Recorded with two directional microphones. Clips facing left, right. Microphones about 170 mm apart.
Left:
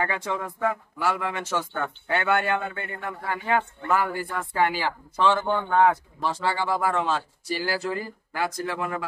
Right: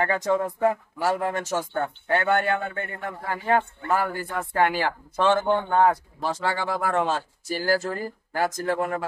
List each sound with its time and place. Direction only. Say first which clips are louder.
0.0 s speech: right 5 dB; 40° right (ahead or behind)
5.7 s speech: even; 40° right (ahead or behind)